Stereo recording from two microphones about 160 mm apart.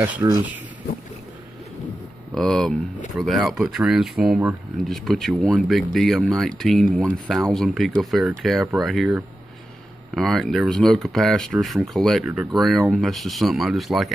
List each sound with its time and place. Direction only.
0.0 s speech: 20° right (ahead or behind)
2.3 s speech: 5° left (ahead or behind)